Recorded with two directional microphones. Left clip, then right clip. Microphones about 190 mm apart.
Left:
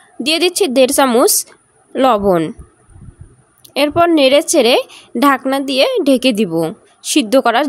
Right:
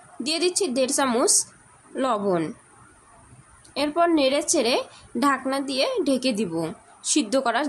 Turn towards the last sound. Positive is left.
turn(degrees=40)  # may be behind; listen again after turning